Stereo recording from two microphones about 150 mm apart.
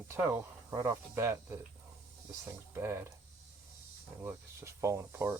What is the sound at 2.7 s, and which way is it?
Speech, 15° right (ahead or behind).